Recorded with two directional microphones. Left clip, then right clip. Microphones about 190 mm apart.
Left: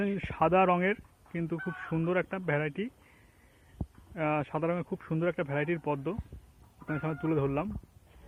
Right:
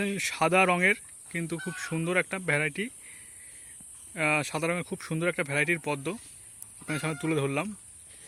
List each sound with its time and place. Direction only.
0.0 s speech: 30° right (ahead or behind)
4.1 s speech: 30° right (ahead or behind)